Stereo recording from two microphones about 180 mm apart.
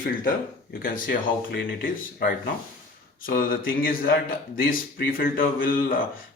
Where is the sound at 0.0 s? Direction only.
50° left (ahead or behind).